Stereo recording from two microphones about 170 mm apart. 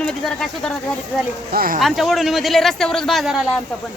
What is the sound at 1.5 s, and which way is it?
Speech, 60° right (ahead or behind).